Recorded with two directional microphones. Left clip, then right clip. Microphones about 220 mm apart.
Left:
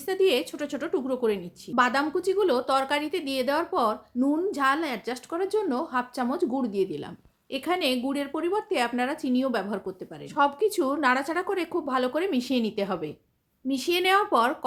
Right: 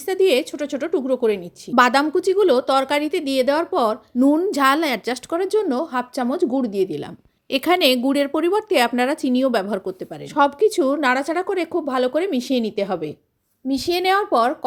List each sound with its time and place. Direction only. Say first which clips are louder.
0.0 s a woman's voice: right 6 dB; 25° right (ahead or behind)
1.7 s speech: right 8 dB; 40° right (ahead or behind)
7.5 s a woman's voice: right 10 dB; 40° right (ahead or behind); by 14.5 s 15° right (ahead or behind)